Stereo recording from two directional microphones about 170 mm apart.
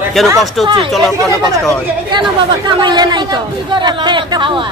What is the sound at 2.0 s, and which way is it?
Speech, 25° right (ahead or behind).